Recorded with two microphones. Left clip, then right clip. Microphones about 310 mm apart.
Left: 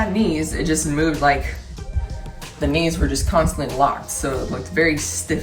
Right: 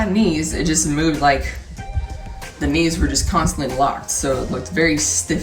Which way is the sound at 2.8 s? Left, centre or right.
Centre.